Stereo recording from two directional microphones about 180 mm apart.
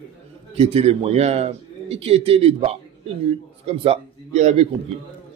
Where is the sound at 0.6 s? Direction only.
35° right (ahead or behind).